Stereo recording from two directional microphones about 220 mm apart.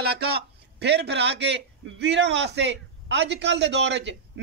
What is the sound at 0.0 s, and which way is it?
A man's voice, 45° right (ahead or behind).